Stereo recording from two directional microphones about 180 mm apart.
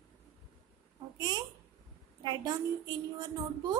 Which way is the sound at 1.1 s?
25° right (ahead or behind).